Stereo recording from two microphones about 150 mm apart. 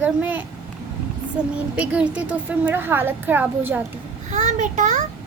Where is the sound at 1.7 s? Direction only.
10° right (ahead or behind).